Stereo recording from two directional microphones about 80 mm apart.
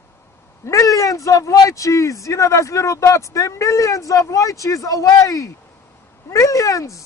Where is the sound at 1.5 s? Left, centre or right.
Left.